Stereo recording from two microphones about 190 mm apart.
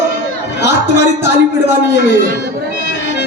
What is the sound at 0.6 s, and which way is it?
Speech, 65° left (ahead or behind).